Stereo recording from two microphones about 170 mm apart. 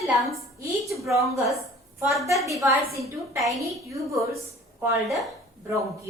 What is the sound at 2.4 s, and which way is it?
A woman's voice, 20° right (ahead or behind).